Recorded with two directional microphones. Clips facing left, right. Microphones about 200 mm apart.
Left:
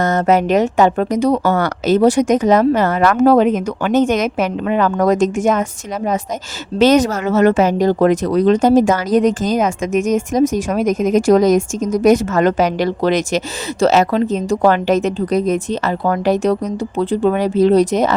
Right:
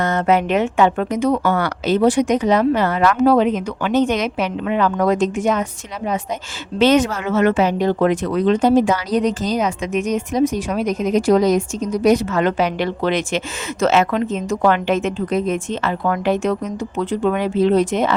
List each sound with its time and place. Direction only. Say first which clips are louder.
0.0 s speech: left 3 dB; 40° left (ahead or behind)
6.7 s speech: left 3 dB; 40° left (ahead or behind)